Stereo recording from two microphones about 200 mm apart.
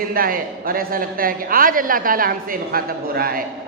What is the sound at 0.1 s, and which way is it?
A woman's voice, 45° right (ahead or behind).